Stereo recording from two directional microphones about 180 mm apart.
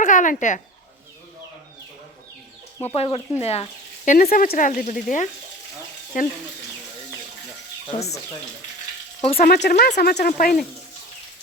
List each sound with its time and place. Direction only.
0.0 s speech: 45° left (ahead or behind)
2.8 s speech: 35° left (ahead or behind)
7.9 s frying: 35° left (ahead or behind)
9.2 s frying: 35° left (ahead or behind)
9.6 s speech: 60° left (ahead or behind)
10.2 s speech: 50° left (ahead or behind)